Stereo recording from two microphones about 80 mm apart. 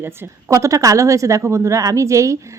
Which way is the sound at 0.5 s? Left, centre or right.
Right.